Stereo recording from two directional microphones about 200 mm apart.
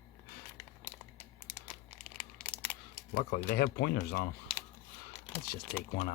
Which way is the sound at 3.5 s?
50° left (ahead or behind).